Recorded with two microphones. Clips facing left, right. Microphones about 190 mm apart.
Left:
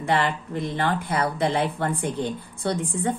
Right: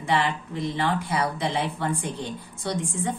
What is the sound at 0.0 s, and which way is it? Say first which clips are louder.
Speech: left 1 dB; 55° left (ahead or behind).